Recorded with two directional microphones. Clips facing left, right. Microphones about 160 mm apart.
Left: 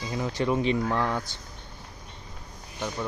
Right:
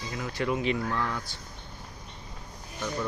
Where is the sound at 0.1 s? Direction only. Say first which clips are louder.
Left 4 dB; 25° left (ahead or behind).